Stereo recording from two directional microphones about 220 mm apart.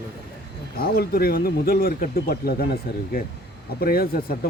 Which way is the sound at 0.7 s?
45° left (ahead or behind).